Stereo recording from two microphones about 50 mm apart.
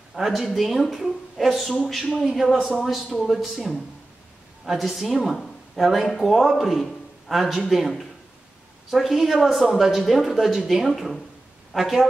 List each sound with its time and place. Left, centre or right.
0.1 s a woman's voice: centre